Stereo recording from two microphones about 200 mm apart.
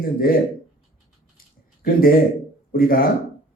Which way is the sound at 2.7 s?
45° left (ahead or behind).